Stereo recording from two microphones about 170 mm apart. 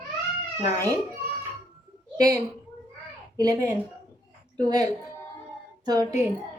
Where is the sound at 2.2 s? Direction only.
20° right (ahead or behind).